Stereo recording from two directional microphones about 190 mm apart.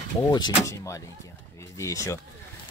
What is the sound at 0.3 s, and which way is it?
Speech, 20° left (ahead or behind).